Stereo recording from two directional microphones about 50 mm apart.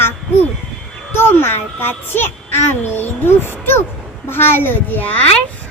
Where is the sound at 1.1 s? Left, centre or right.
Left.